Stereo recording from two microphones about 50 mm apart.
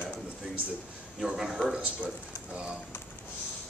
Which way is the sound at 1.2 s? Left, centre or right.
Centre.